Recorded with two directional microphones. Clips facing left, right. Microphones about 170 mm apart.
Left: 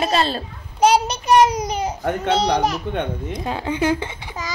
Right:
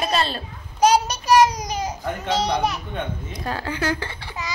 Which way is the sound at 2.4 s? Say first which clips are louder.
Left 3 dB; 35° left (ahead or behind).